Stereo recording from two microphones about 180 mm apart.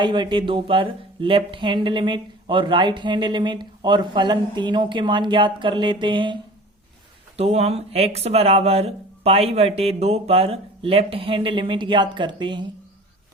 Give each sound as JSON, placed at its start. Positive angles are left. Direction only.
{"t": 0.0, "sound": "speech", "side_deg": -25}